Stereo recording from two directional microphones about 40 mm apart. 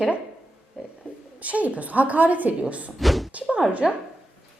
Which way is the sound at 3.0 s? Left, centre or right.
Centre.